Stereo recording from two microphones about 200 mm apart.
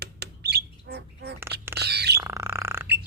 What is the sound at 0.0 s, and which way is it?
Bird, 55° right (ahead or behind).